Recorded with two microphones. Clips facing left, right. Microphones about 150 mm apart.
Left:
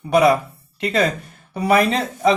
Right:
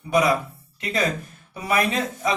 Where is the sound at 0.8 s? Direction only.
65° left (ahead or behind).